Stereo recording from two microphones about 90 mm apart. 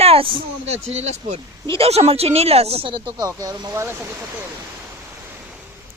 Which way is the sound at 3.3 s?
40° right (ahead or behind).